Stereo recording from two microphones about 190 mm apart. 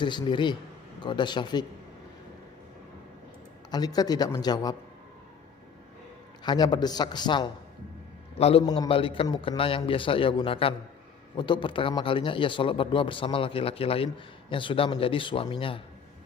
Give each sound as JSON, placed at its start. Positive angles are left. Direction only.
{"t": 0.0, "sound": "speech", "side_deg": 25}
{"t": 3.7, "sound": "speech", "side_deg": 20}
{"t": 6.4, "sound": "a man's voice", "side_deg": 20}
{"t": 8.6, "sound": "speech", "side_deg": 20}